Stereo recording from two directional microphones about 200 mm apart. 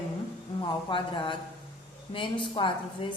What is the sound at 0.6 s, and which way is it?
Speech, 25° left (ahead or behind).